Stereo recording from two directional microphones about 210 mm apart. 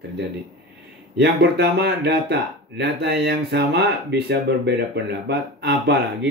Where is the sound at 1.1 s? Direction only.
55° right (ahead or behind).